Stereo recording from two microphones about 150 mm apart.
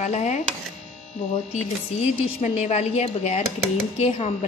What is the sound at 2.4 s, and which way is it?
Speech, 45° left (ahead or behind).